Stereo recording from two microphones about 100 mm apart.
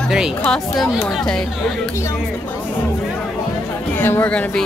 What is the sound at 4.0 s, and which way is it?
Speech, 20° left (ahead or behind).